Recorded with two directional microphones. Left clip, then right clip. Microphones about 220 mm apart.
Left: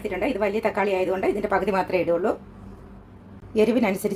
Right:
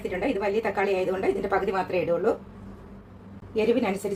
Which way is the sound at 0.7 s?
45° left (ahead or behind).